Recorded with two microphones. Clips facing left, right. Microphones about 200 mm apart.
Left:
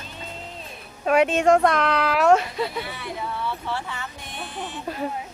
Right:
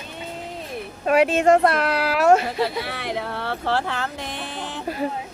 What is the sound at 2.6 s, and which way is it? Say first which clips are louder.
Speech: right 4 dB; 90° right.